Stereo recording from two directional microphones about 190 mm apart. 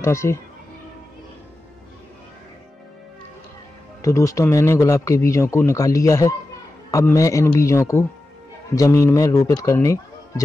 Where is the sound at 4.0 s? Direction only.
15° left (ahead or behind).